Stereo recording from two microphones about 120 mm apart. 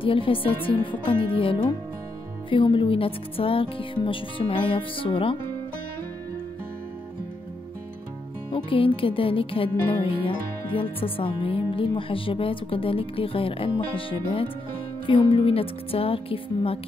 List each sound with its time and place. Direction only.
0.0 s music: 50° left (ahead or behind)
8.5 s music: 45° left (ahead or behind)